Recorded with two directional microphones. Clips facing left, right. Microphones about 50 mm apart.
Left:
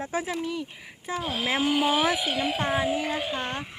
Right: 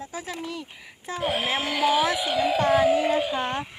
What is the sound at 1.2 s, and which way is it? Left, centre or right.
Speech, right.